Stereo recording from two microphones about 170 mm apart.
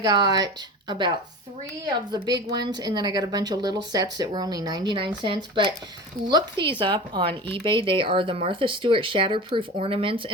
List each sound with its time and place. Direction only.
0.0 s a woman's voice: 25° right (ahead or behind)